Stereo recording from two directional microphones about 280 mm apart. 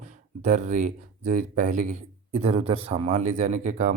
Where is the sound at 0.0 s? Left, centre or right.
Right.